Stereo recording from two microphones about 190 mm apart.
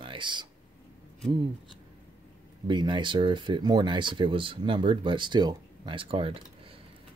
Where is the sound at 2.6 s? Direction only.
25° right (ahead or behind).